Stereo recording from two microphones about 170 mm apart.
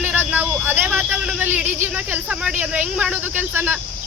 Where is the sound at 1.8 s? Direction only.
10° right (ahead or behind).